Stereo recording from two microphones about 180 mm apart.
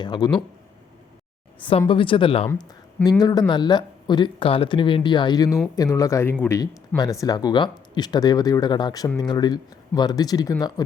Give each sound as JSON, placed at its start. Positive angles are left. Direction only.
{"t": 0.0, "sound": "speech", "side_deg": 25}
{"t": 1.9, "sound": "speech", "side_deg": 30}